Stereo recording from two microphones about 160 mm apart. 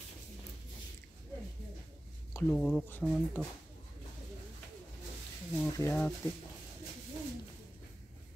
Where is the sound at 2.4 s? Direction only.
5° left (ahead or behind).